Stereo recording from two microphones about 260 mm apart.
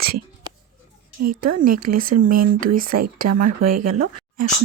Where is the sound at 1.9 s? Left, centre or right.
Right.